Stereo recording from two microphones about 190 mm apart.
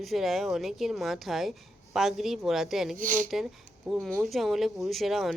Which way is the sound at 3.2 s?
Centre (ahead or behind).